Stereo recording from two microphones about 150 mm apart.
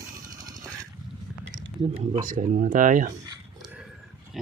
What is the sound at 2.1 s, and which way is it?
Speech, 55° right (ahead or behind).